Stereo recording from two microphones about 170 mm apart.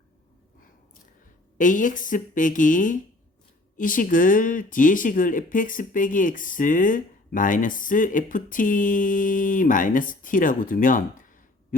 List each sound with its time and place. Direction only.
1.5 s speech: 50° left (ahead or behind)